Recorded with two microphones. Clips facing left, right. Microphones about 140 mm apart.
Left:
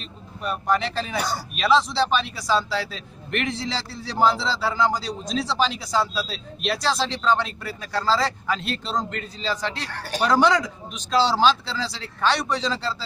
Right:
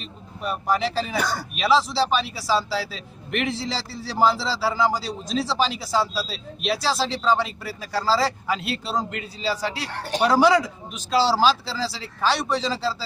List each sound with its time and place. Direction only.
0.0 s speech: 5° right (ahead or behind)
1.1 s speech: 50° right (ahead or behind)
1.5 s a man's voice: 5° right (ahead or behind)
9.8 s speech: 25° right (ahead or behind)
10.2 s a man's voice: 5° right (ahead or behind)